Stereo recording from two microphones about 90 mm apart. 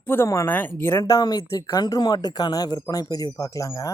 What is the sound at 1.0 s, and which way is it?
Speech, 45° left (ahead or behind).